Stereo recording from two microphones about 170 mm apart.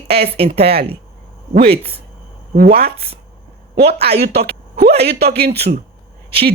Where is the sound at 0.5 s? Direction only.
70° right (ahead or behind).